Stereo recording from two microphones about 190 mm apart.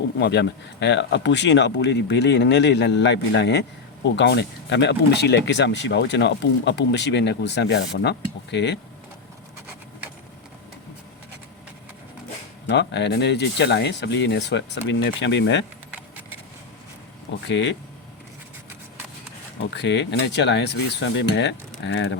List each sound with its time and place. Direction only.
0.2 s speech: 60° left (ahead or behind)
12.6 s speech: 65° left (ahead or behind)
17.5 s speech: 70° left (ahead or behind)
19.7 s speech: 65° left (ahead or behind)